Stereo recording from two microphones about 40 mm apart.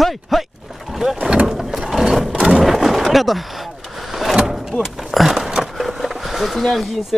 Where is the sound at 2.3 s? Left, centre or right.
Right.